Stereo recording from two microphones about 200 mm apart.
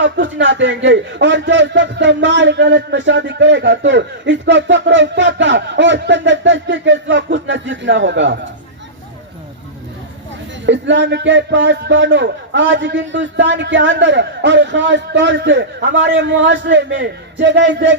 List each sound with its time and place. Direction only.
0.0 s a man's voice: 65° right (ahead or behind)
10.7 s a man's voice: 65° right (ahead or behind)